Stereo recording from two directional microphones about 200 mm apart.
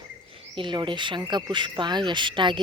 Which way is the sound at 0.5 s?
25° right (ahead or behind).